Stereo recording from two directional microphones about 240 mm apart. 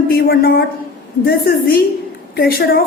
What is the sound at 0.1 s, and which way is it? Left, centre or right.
A woman's voice, left.